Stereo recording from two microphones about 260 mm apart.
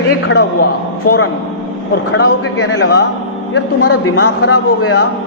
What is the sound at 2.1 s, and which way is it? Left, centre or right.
Speech, left.